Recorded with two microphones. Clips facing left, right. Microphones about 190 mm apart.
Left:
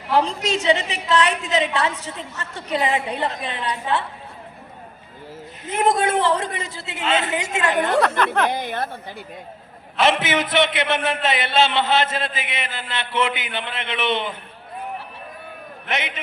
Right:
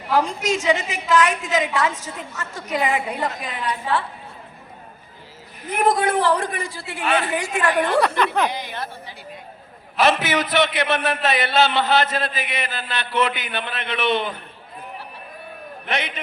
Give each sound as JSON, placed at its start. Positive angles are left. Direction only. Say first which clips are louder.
{"t": 0.1, "sound": "a man's voice", "louder": "even", "side_deg": 30}
{"t": 5.6, "sound": "a man's voice", "louder": "even", "side_deg": 25}
{"t": 8.0, "sound": "speech", "louder": "even", "side_deg": 0}
{"t": 8.4, "sound": "a woman's voice", "louder": "left 4 dB", "side_deg": 55}
{"t": 10.0, "sound": "a man's voice", "louder": "even", "side_deg": 25}